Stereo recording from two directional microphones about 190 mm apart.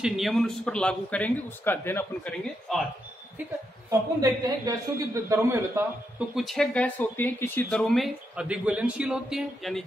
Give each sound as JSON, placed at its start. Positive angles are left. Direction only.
{"t": 0.0, "sound": "speech", "side_deg": 0}
{"t": 4.2, "sound": "a man's voice", "side_deg": -15}
{"t": 6.1, "sound": "speech", "side_deg": 0}